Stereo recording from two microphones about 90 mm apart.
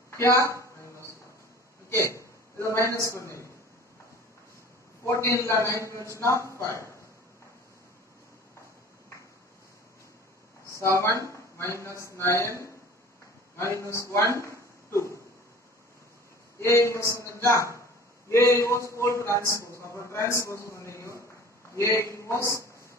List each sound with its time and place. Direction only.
0.2 s a sound: 30° left (ahead or behind)
1.9 s a man's voice: 30° left (ahead or behind)
5.0 s speech: 35° left (ahead or behind)
11.0 s speech: 30° left (ahead or behind)
13.6 s speech: 30° left (ahead or behind)
14.3 s a sound: 30° left (ahead or behind)
16.6 s speech: 30° left (ahead or behind)
19.8 s a sound: 30° left (ahead or behind)
21.7 s speech: 30° left (ahead or behind)